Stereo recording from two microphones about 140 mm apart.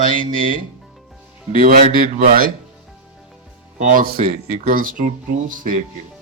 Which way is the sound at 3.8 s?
75° right (ahead or behind).